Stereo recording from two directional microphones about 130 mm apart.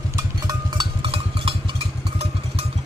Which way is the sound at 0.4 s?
40° right (ahead or behind).